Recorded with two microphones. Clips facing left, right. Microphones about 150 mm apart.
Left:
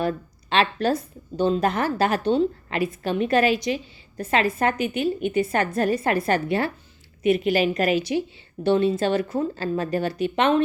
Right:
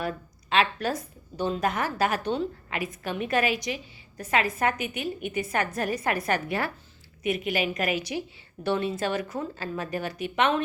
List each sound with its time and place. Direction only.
0.5 s a woman's voice: 30° left (ahead or behind)